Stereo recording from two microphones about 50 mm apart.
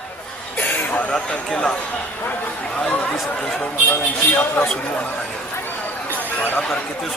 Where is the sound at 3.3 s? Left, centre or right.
Centre.